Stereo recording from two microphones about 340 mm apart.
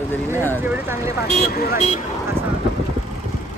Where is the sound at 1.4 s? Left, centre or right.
Left.